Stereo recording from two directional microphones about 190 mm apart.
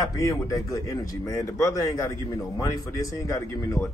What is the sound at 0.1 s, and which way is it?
Speech, 20° left (ahead or behind).